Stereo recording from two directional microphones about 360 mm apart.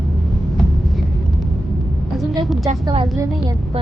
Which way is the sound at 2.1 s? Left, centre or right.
Centre.